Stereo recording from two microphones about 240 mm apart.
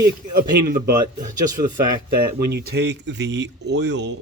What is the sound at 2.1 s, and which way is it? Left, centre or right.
Speech, right.